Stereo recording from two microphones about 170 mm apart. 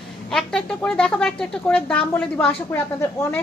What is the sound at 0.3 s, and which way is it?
Speech, 5° left (ahead or behind).